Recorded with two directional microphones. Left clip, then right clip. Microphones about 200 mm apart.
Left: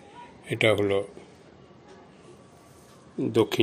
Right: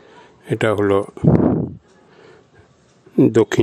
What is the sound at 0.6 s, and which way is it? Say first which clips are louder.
Speech: right 6 dB; 40° right (ahead or behind).